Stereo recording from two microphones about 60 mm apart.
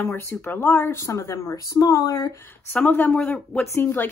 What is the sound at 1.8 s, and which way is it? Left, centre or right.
Speech, left.